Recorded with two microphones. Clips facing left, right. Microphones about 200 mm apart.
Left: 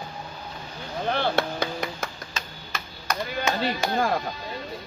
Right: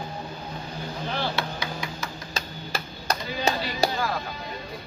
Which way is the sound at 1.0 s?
55° left (ahead or behind).